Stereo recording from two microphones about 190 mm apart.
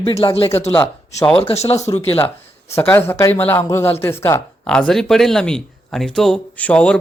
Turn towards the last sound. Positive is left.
turn(degrees=5)  # may be behind; listen again after turning